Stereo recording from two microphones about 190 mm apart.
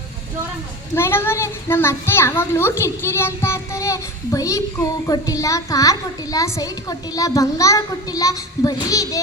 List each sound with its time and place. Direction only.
0.9 s a child's voice: 10° left (ahead or behind)